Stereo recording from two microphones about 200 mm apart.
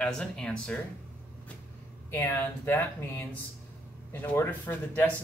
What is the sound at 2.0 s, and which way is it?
A man's voice, 10° left (ahead or behind).